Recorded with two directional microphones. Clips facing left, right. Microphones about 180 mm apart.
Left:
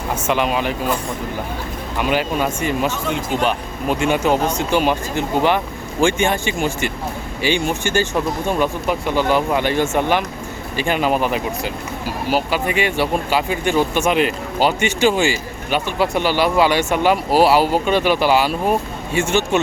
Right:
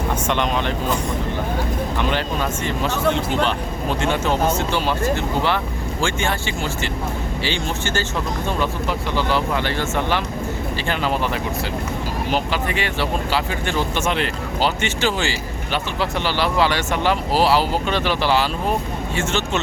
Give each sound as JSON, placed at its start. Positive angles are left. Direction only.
{"t": 0.3, "sound": "speech", "side_deg": 5}
{"t": 2.0, "sound": "speech", "side_deg": 10}